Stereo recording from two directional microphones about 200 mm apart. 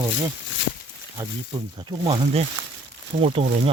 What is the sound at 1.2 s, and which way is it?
Speech, 20° right (ahead or behind).